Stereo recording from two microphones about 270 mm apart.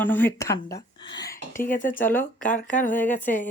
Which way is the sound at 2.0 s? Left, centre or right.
Centre.